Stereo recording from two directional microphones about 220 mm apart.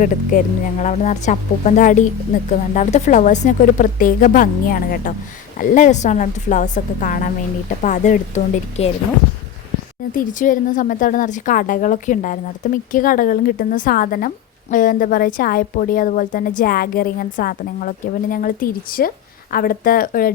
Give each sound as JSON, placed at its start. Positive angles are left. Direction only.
{"t": 0.0, "sound": "a woman's voice", "side_deg": 35}
{"t": 10.2, "sound": "a woman's voice", "side_deg": 35}